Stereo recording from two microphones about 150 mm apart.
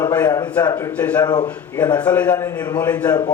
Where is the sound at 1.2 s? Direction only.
30° left (ahead or behind).